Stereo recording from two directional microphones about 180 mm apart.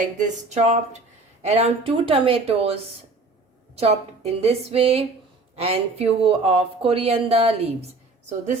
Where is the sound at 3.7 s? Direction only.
35° right (ahead or behind).